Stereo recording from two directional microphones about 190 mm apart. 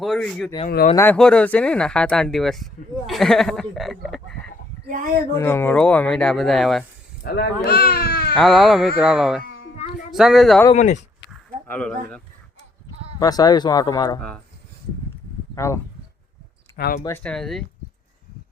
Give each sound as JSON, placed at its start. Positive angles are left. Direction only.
{"t": 0.0, "sound": "speech", "side_deg": 0}
{"t": 4.9, "sound": "speech", "side_deg": -45}
{"t": 5.3, "sound": "speech", "side_deg": 10}
{"t": 7.2, "sound": "speech", "side_deg": 60}
{"t": 8.4, "sound": "speech", "side_deg": 0}
{"t": 9.4, "sound": "a sound", "side_deg": 50}
{"t": 10.1, "sound": "speech", "side_deg": 0}
{"t": 10.8, "sound": "speech", "side_deg": 40}
{"t": 11.7, "sound": "speech", "side_deg": 5}
{"t": 13.1, "sound": "speech", "side_deg": 20}
{"t": 14.2, "sound": "speech", "side_deg": 5}
{"t": 15.5, "sound": "speech", "side_deg": 15}
{"t": 16.7, "sound": "speech", "side_deg": 50}
{"t": 17.1, "sound": "speech", "side_deg": 10}